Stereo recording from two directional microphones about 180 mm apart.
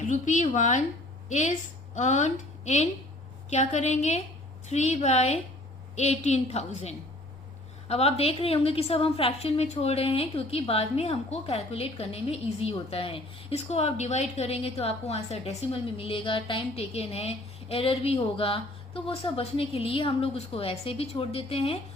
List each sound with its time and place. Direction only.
0.1 s a woman's voice: 45° left (ahead or behind)